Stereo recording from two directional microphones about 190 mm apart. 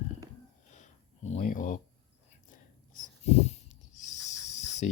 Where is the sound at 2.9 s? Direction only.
35° left (ahead or behind).